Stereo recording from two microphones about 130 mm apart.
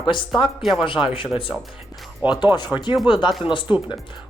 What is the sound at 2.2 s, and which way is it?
Speech, 35° left (ahead or behind).